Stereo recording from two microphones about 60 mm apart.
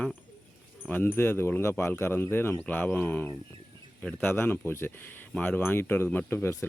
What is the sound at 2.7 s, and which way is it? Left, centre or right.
Wind chime, left.